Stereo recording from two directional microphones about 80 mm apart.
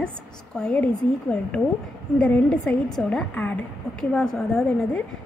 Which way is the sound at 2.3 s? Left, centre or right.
Centre.